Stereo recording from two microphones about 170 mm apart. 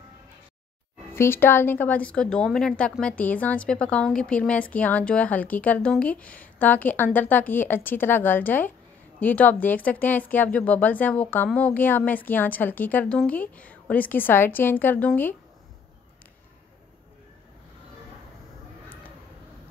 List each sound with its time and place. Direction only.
1.1 s a woman's voice: 15° left (ahead or behind)